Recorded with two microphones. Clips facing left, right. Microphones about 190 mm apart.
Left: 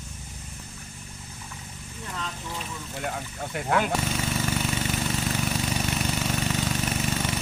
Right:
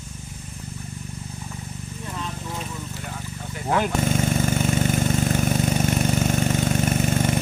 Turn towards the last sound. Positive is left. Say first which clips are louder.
# right 6 dB
turn(degrees=-50)  # may be behind; listen again after turning